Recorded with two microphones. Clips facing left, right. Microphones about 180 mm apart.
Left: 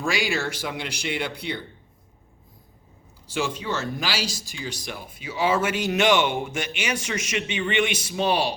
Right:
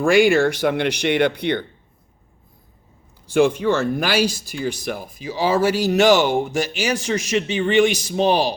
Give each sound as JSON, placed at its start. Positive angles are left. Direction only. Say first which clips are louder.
{"t": 0.0, "sound": "speech", "louder": "right 12 dB", "side_deg": -55}
{"t": 3.2, "sound": "speech", "louder": "right 11 dB", "side_deg": -55}
{"t": 5.3, "sound": "speech", "louder": "right 5 dB", "side_deg": -35}